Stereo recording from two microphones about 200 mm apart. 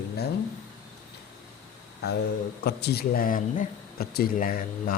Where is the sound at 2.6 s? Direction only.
55° left (ahead or behind).